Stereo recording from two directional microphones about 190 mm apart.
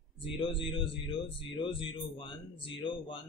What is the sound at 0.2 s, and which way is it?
Speech, 25° left (ahead or behind).